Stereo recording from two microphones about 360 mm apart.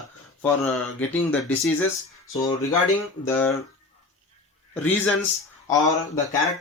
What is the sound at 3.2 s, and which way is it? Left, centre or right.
Speech, centre.